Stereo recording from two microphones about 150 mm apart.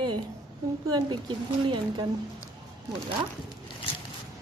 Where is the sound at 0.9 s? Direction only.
30° right (ahead or behind).